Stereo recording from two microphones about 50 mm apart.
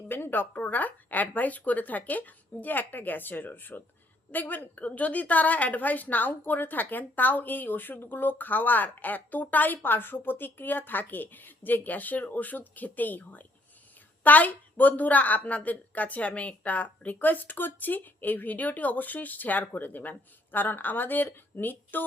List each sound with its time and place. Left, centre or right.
0.1 s a woman's voice: left